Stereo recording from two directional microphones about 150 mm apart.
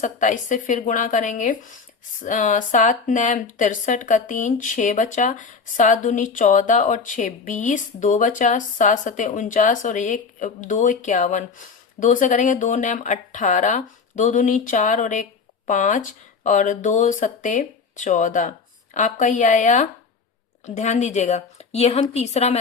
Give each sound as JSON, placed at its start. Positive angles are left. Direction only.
{"t": 0.0, "sound": "a woman's voice", "side_deg": 55}